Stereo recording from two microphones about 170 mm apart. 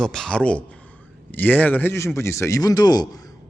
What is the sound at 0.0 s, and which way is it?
Speech, 5° left (ahead or behind).